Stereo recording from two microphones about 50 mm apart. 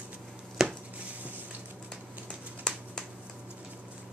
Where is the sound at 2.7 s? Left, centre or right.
Centre.